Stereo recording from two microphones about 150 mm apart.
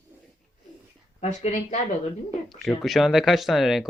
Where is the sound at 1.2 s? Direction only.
50° left (ahead or behind).